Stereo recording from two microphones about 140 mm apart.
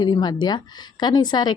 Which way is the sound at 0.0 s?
30° left (ahead or behind).